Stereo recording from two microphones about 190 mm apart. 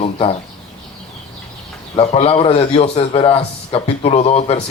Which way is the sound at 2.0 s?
30° left (ahead or behind).